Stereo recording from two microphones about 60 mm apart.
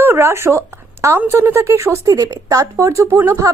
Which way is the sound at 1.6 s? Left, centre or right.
Right.